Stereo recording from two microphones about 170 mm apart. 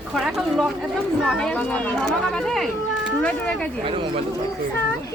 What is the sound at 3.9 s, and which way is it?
Speech, 30° right (ahead or behind).